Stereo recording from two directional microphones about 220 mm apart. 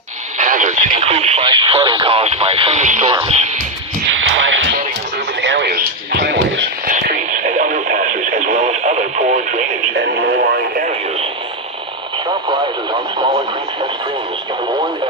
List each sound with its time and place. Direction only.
0.4 s speech: 35° right (ahead or behind)
4.3 s radio: 60° right (ahead or behind)
5.4 s a sound: 50° right (ahead or behind)
6.9 s radio: 35° right (ahead or behind)
9.9 s radio: 55° right (ahead or behind)